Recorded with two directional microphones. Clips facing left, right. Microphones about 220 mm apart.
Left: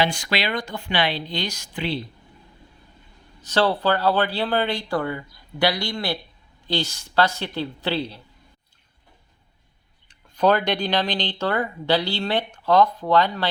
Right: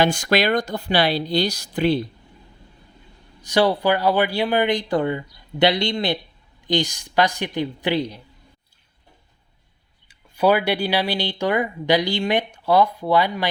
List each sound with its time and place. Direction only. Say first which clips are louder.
0.0 s speech: right 5 dB; 45° right (ahead or behind)
3.4 s speech: right 2 dB; 15° right (ahead or behind)
10.1 s speech: right 1 dB; 10° right (ahead or behind)